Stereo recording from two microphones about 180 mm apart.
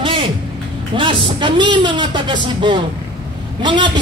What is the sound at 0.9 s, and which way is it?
Speech, 30° right (ahead or behind).